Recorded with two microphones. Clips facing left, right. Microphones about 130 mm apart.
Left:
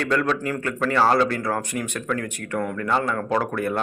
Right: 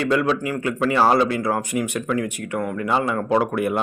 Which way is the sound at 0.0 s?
10° right (ahead or behind).